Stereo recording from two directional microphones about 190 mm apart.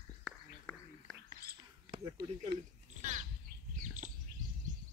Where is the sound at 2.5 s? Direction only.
40° right (ahead or behind).